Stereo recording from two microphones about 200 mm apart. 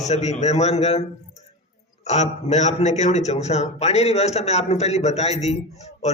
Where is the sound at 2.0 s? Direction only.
35° left (ahead or behind).